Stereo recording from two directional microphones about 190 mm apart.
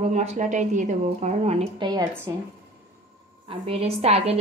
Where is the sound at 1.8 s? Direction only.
20° right (ahead or behind).